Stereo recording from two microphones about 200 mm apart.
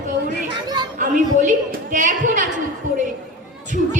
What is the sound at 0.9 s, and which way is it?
A woman's voice, 40° right (ahead or behind).